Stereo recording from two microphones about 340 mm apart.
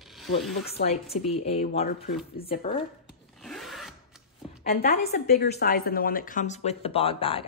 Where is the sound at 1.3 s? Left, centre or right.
Centre.